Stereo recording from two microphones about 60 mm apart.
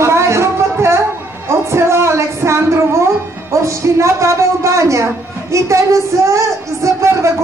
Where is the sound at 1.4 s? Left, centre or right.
Right.